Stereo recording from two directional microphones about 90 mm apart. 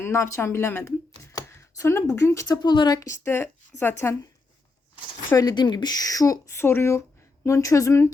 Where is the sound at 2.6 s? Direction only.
55° left (ahead or behind).